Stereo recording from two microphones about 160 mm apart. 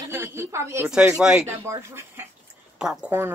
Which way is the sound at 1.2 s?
5° right (ahead or behind).